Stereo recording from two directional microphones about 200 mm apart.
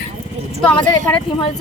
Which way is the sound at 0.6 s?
5° left (ahead or behind).